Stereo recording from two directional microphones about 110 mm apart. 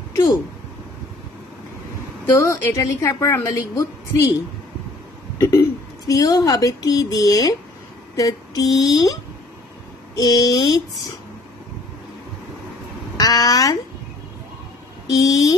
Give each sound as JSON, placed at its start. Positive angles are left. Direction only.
{"t": 0.1, "sound": "a sound", "side_deg": 35}
{"t": 2.2, "sound": "a woman's voice", "side_deg": 20}
{"t": 5.4, "sound": "speech", "side_deg": 25}
{"t": 13.2, "sound": "speech", "side_deg": 35}
{"t": 15.0, "sound": "speech", "side_deg": 30}